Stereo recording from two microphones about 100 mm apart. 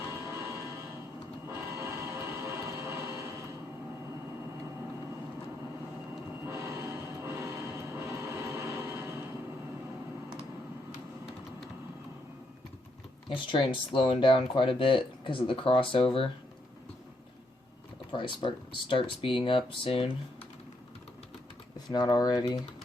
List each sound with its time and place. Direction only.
0.1 s change ringing: 30° right (ahead or behind)
1.5 s vehicle: 25° right (ahead or behind)
6.4 s music: 25° right (ahead or behind)
13.2 s speech: 55° left (ahead or behind)
18.1 s speech: 55° left (ahead or behind)
21.8 s speech: 40° left (ahead or behind)